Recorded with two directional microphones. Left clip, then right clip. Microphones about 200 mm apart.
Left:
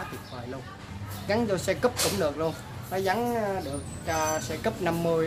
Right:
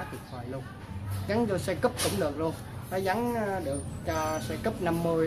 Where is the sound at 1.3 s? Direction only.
10° left (ahead or behind).